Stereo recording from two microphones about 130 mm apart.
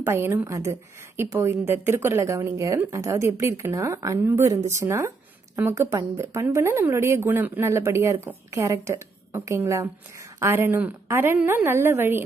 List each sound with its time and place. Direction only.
0.0 s a woman's voice: 20° right (ahead or behind)